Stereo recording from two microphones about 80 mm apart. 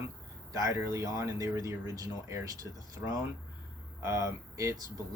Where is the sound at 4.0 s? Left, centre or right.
Right.